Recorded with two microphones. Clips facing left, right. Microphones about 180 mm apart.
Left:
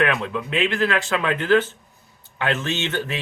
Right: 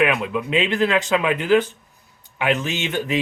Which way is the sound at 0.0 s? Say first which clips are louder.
Right 2 dB; 15° right (ahead or behind).